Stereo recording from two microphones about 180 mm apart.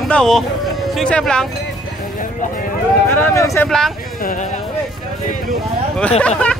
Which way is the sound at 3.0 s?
10° left (ahead or behind).